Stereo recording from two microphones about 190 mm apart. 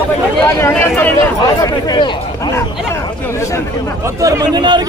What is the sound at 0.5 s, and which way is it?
Chatter, 15° left (ahead or behind).